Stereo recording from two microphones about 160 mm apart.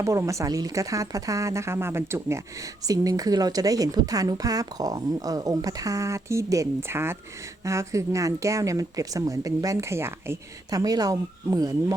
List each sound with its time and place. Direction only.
0.0 s a woman's voice: 20° right (ahead or behind)